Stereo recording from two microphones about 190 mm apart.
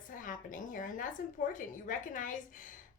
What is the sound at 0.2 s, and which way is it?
A woman's voice, 45° left (ahead or behind).